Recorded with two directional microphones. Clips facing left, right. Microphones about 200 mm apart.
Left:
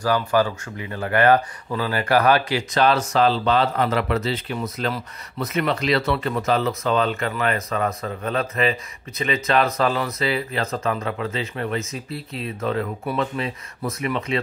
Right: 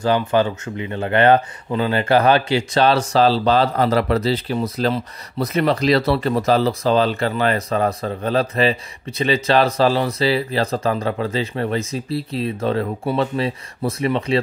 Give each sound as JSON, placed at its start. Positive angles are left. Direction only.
{"t": 0.0, "sound": "speech", "side_deg": -25}